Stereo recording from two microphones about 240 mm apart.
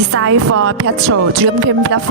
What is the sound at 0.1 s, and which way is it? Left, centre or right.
Speech, right.